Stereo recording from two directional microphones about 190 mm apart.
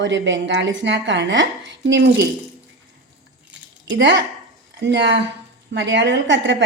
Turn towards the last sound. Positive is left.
turn(degrees=-70)  # may be behind; listen again after turning